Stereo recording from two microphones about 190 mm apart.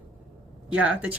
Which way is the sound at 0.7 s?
5° right (ahead or behind).